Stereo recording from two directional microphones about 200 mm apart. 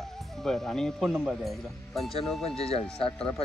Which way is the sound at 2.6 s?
30° left (ahead or behind).